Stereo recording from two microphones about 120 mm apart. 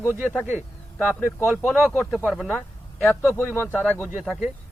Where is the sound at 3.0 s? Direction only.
20° left (ahead or behind).